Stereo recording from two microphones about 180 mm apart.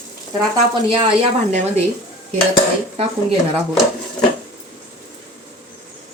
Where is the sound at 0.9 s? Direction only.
30° right (ahead or behind).